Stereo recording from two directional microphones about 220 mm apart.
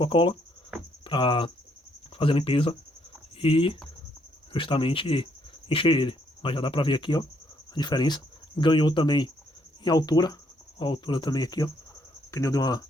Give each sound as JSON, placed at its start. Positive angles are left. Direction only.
{"t": 0.0, "sound": "speech", "side_deg": 20}